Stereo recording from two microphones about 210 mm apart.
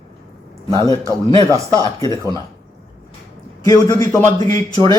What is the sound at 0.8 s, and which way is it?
A man's voice, 15° left (ahead or behind).